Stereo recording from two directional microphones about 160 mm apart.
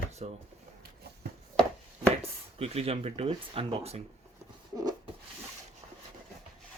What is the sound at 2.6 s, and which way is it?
Speech, 40° right (ahead or behind).